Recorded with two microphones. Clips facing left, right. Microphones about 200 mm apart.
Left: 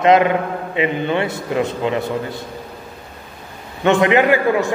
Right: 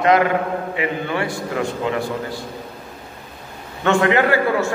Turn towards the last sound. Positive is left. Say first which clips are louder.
# left 2 dB
turn(degrees=15)  # may be behind; listen again after turning